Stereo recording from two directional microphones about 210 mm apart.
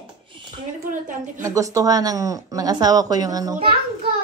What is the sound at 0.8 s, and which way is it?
Speech, 40° right (ahead or behind).